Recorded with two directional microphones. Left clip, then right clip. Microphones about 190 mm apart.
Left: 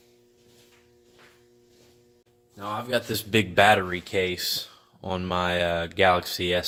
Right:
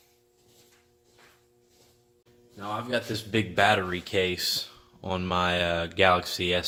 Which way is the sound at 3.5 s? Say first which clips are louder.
Left 4 dB; 40° left (ahead or behind).